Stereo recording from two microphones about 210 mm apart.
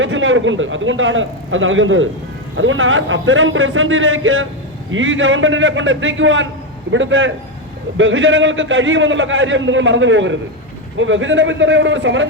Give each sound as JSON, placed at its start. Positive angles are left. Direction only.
{"t": 0.0, "sound": "a man's voice", "side_deg": -65}